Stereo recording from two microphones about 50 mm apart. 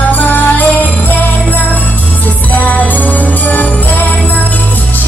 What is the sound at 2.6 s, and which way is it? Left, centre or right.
Jingle bell, left.